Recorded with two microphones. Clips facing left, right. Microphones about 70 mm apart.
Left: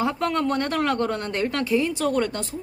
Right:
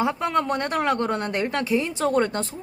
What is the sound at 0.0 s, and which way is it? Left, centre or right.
A woman's voice, centre.